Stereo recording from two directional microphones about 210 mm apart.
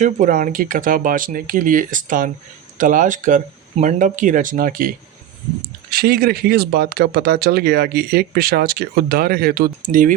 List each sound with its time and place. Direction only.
0.0 s speech: 40° right (ahead or behind)
5.9 s speech: 45° right (ahead or behind)